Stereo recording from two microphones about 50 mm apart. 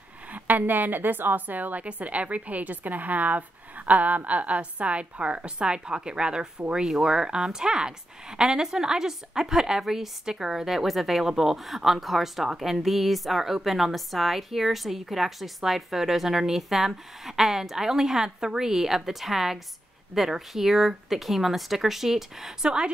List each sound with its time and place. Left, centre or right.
0.3 s a woman's voice: right; by 22.9 s centre